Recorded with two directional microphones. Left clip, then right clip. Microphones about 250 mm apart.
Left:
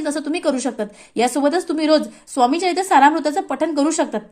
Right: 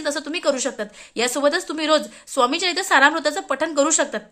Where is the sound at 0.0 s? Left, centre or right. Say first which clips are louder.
Left 1 dB; centre.